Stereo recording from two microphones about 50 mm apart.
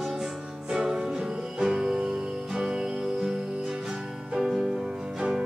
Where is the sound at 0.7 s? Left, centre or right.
Centre.